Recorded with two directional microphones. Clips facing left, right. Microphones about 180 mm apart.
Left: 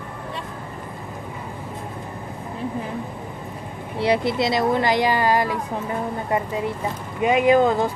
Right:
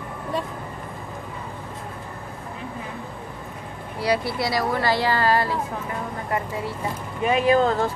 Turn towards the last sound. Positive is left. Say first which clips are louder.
# left 2 dB
turn(degrees=15)  # may be behind; listen again after turning